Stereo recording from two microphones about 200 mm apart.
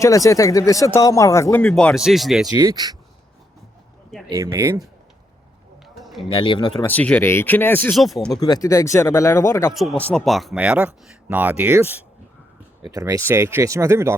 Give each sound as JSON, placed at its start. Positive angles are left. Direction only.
{"t": 0.0, "sound": "speech", "side_deg": 15}
{"t": 2.5, "sound": "speech", "side_deg": -20}
{"t": 4.3, "sound": "speech", "side_deg": -15}
{"t": 5.9, "sound": "a sound", "side_deg": 0}
{"t": 6.2, "sound": "speech", "side_deg": 25}
{"t": 6.8, "sound": "speech", "side_deg": 5}
{"t": 8.4, "sound": "speech", "side_deg": 20}
{"t": 9.7, "sound": "speech", "side_deg": 0}